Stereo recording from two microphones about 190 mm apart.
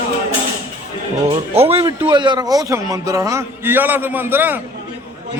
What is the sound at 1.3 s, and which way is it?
A man's voice, 30° right (ahead or behind).